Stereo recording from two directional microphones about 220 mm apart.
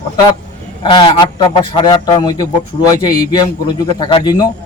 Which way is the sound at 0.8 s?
20° left (ahead or behind).